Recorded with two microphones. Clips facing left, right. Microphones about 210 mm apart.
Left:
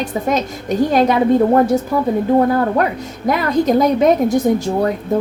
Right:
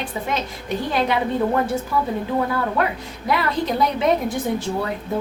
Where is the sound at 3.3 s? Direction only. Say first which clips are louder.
Left 7 dB; 45° left (ahead or behind).